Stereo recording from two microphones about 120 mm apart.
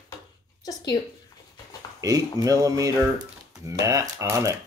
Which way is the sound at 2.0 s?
30° right (ahead or behind).